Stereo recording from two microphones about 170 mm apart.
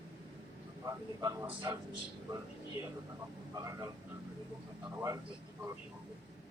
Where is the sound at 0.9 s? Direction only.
20° right (ahead or behind).